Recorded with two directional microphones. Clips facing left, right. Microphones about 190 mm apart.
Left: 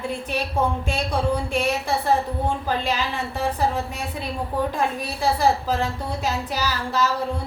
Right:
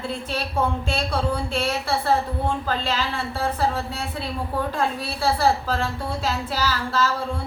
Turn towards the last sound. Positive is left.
turn(degrees=15)  # may be behind; listen again after turning